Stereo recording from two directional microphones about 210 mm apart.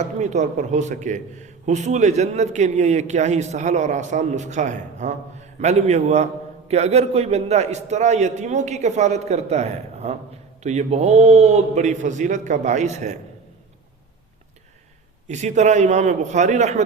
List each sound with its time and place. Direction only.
0.0 s a man's voice: 35° right (ahead or behind)
15.3 s a man's voice: 35° right (ahead or behind)